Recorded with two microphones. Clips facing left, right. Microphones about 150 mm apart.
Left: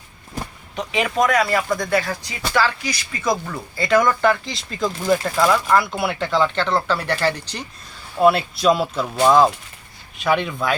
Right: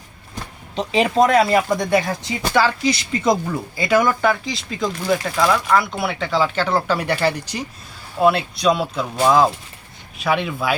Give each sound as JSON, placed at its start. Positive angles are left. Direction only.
{"t": 0.8, "sound": "speech", "side_deg": -30}
{"t": 3.4, "sound": "speech", "side_deg": -10}
{"t": 8.2, "sound": "speech", "side_deg": 0}